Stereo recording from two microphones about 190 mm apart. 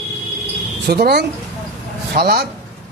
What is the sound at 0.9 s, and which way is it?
Speech, 55° right (ahead or behind).